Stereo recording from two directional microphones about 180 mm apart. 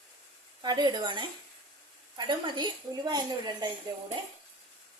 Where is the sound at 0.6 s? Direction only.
25° right (ahead or behind).